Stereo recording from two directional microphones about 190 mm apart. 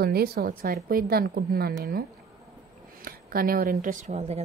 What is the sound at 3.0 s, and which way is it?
Speech, 50° right (ahead or behind).